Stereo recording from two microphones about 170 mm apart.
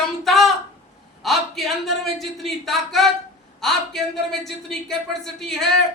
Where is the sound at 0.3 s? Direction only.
Centre (ahead or behind).